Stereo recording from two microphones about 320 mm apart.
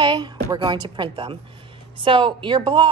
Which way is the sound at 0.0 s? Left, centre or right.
Centre.